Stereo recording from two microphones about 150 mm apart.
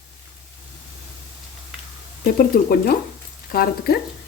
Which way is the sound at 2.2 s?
80° left.